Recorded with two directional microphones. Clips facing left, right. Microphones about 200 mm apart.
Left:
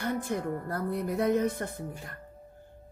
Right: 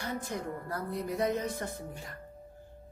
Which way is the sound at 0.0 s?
55° left (ahead or behind).